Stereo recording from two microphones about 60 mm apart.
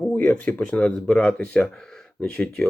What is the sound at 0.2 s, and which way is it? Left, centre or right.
Speech, left.